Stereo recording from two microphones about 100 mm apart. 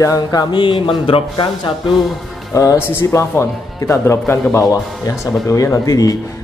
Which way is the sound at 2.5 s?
30° left (ahead or behind).